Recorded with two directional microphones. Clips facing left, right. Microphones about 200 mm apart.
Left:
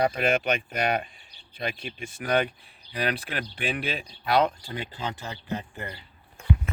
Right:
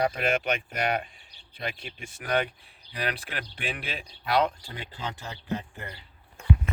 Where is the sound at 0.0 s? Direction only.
20° left (ahead or behind).